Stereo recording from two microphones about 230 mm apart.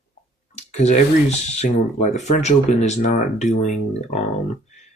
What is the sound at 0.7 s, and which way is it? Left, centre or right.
Speech, left.